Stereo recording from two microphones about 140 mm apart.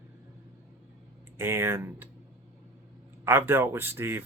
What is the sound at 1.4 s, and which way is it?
Speech, 15° right (ahead or behind).